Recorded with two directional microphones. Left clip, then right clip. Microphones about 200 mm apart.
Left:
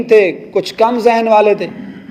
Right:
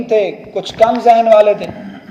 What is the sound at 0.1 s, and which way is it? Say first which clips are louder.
A man's voice: left 5 dB; 45° left (ahead or behind).